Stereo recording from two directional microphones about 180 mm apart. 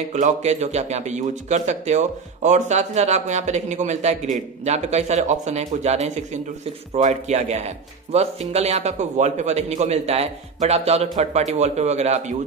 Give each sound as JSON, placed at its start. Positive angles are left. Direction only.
{"t": 0.1, "sound": "a man's voice", "side_deg": -40}